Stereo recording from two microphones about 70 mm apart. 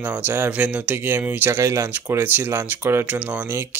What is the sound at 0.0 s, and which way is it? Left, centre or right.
Speech, right.